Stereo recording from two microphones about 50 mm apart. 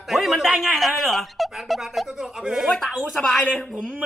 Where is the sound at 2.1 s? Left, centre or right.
Centre.